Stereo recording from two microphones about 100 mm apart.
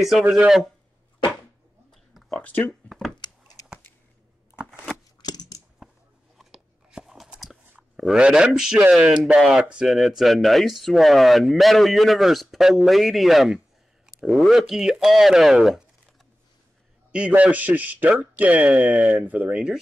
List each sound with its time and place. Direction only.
0.0 s speech: 5° right (ahead or behind)
1.9 s a sound: centre (ahead or behind)
2.4 s speech: 15° left (ahead or behind)
5.2 s scissors: 45° left (ahead or behind)
6.3 s a sound: 5° right (ahead or behind)
7.7 s a man's voice: 5° right (ahead or behind)
17.1 s a man's voice: 10° right (ahead or behind)